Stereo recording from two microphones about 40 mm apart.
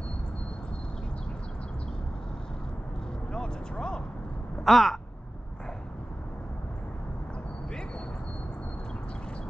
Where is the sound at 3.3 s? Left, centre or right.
Centre.